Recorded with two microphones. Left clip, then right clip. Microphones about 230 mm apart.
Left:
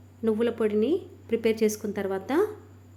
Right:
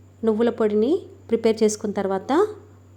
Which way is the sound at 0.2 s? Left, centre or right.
Centre.